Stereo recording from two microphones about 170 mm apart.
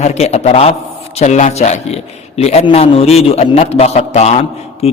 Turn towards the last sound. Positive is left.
turn(degrees=35)  # may be behind; listen again after turning